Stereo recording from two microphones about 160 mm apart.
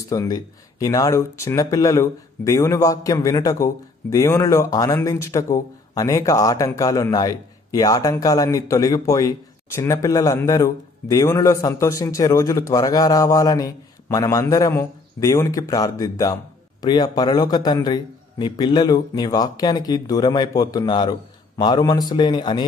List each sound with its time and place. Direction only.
0.1 s a man's voice: 20° left (ahead or behind)